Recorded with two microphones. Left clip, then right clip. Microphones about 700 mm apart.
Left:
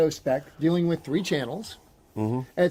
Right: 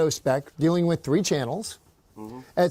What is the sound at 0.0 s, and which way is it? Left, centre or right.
Speech, right.